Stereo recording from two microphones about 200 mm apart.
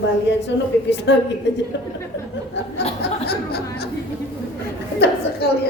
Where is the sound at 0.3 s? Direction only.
60° left (ahead or behind).